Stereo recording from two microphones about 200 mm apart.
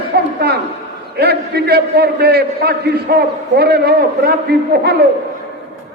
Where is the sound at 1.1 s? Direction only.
55° right (ahead or behind).